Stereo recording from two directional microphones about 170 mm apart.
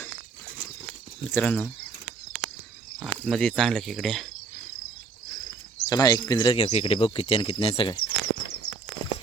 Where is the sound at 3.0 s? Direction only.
Centre (ahead or behind).